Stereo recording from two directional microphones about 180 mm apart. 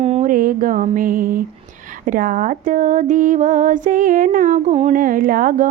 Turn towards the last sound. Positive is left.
turn(degrees=-50)  # may be behind; listen again after turning